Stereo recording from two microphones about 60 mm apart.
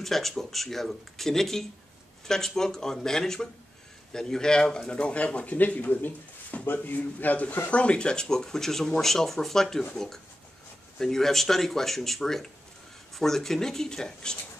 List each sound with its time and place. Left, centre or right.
0.0 s speech: centre; by 7.7 s left
7.7 s speech: centre